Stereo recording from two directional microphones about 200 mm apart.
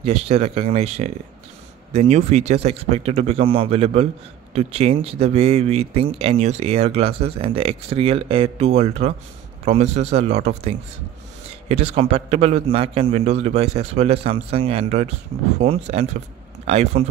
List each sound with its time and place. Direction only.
0.0 s speech: 30° right (ahead or behind)